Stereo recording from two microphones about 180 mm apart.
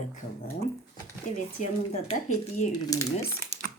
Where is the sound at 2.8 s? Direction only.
20° left (ahead or behind).